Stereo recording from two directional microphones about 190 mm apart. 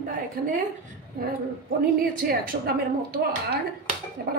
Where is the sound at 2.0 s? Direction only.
45° right (ahead or behind).